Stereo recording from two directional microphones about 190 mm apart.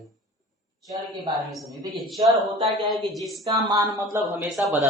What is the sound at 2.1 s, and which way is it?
Speech, 15° right (ahead or behind).